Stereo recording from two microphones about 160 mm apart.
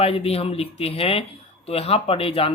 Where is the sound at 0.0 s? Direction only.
40° left (ahead or behind).